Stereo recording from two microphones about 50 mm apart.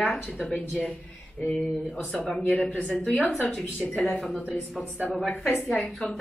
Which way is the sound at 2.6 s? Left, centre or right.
Left.